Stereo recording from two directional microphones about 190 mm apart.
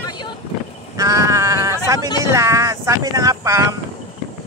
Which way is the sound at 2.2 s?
15° right (ahead or behind).